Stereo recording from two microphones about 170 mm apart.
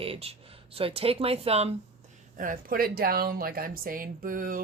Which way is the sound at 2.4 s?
55° right (ahead or behind).